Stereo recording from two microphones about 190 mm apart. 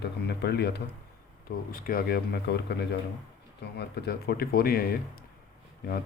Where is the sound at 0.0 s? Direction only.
60° left (ahead or behind).